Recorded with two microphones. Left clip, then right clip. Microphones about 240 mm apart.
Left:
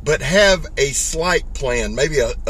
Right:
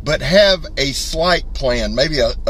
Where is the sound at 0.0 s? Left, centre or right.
Centre.